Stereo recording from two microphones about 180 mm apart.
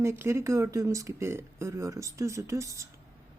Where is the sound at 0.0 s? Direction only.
15° right (ahead or behind).